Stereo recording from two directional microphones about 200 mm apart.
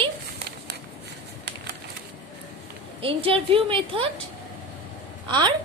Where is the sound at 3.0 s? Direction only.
25° right (ahead or behind).